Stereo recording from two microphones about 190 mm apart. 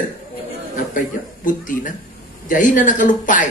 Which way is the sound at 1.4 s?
45° left (ahead or behind).